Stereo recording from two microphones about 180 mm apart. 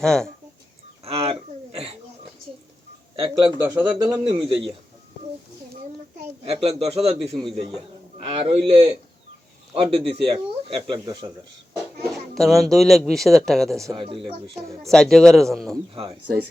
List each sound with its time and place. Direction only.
0.0 s speech: 5° left (ahead or behind)
1.0 s a sound: 35° right (ahead or behind)
3.2 s a man's voice: 30° right (ahead or behind)
3.6 s speech: 15° right (ahead or behind)
4.2 s a man's voice: 30° right (ahead or behind)
6.4 s a man's voice: 35° right (ahead or behind)
12.1 s speech: centre (ahead or behind)
13.9 s speech: 25° right (ahead or behind)
14.5 s speech: centre (ahead or behind)